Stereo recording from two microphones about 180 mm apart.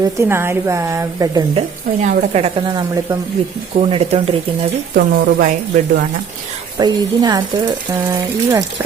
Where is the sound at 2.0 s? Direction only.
35° right (ahead or behind).